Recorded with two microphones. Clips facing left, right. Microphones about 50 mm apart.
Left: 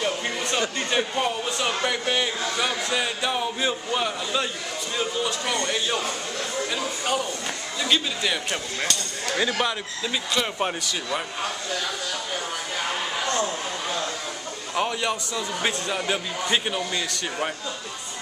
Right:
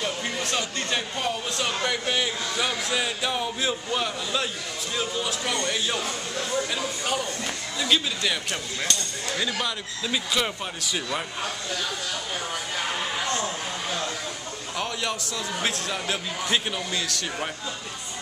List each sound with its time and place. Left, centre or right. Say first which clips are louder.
0.0 s a sound: left 2 dB; centre
0.7 s speech: left 4 dB; centre
9.3 s speech: left 4 dB; left
10.0 s speech: even; centre
13.4 s speech: left 3 dB; centre